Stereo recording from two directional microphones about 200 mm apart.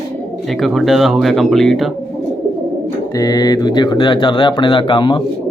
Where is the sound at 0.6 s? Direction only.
Centre (ahead or behind).